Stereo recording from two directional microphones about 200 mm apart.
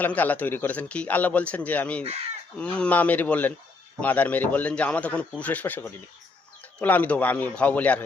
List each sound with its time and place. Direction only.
0.0 s a man's voice: 10° left (ahead or behind)